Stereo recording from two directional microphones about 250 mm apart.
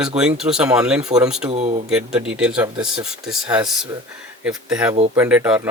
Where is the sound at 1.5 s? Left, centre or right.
Right.